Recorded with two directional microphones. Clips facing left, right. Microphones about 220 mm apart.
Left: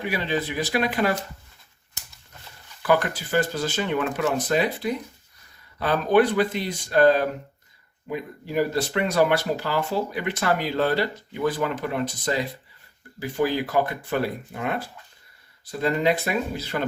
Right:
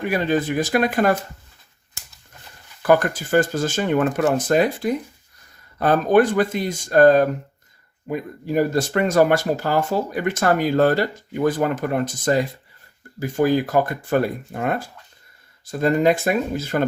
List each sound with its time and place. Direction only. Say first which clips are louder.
0.0 s speech: right 6 dB; 45° right (ahead or behind)
2.8 s speech: right 5 dB; 45° right (ahead or behind)